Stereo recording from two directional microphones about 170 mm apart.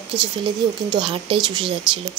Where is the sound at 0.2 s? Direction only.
25° right (ahead or behind).